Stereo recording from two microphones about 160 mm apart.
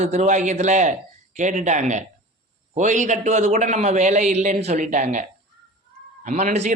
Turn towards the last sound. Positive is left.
turn(degrees=-45)  # may be behind; listen again after turning